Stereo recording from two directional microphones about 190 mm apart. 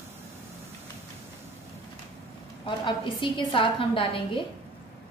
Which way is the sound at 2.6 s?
25° left (ahead or behind).